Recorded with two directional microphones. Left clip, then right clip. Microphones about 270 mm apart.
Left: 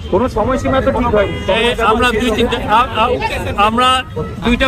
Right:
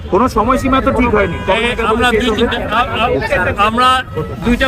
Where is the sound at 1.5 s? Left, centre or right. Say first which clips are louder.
Left 3 dB; centre.